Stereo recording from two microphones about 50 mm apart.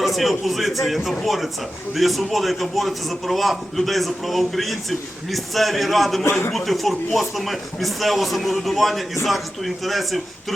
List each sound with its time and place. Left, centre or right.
0.0 s a man's voice: centre